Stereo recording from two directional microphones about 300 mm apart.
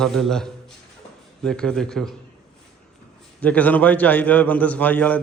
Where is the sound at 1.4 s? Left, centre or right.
Centre.